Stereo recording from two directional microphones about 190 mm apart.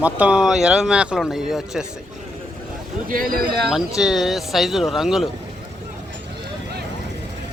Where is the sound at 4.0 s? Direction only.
5° right (ahead or behind).